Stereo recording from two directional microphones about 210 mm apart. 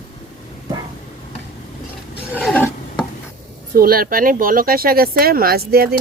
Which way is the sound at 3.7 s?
45° right (ahead or behind).